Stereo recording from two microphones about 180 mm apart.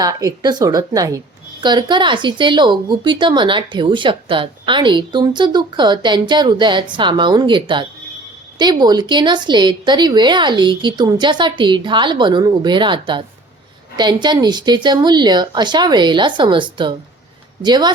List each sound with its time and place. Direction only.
0.0 s speech: 20° right (ahead or behind)